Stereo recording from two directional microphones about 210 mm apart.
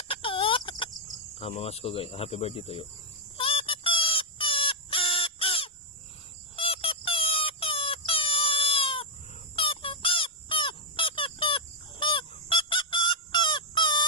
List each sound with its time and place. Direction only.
0.1 s chicken: 25° left (ahead or behind)
1.4 s speech: 30° left (ahead or behind)
3.3 s chicken: 25° left (ahead or behind)
6.6 s a sound: 25° left (ahead or behind)